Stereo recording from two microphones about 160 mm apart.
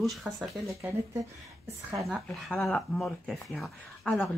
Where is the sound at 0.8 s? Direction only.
20° right (ahead or behind).